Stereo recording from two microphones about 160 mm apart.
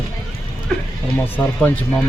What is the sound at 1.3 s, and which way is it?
Speech, 10° left (ahead or behind).